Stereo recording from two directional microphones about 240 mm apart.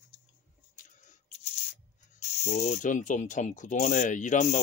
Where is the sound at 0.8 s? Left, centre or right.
Left.